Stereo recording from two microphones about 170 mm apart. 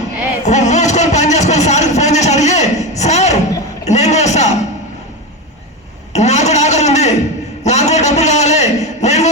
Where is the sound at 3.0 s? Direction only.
40° left (ahead or behind).